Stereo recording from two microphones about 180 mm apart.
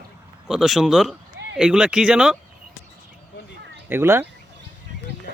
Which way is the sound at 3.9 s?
15° right (ahead or behind).